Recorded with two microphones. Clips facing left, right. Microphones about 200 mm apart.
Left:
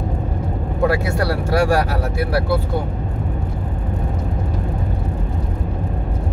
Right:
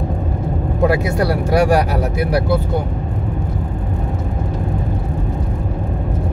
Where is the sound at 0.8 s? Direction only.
15° right (ahead or behind).